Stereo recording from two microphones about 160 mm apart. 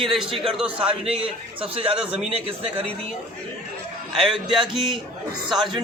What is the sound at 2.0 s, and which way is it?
Speech, 35° right (ahead or behind).